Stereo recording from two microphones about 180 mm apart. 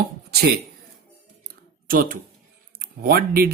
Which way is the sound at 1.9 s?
50° right (ahead or behind).